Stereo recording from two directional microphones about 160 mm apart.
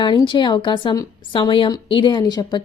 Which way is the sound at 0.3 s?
30° left (ahead or behind).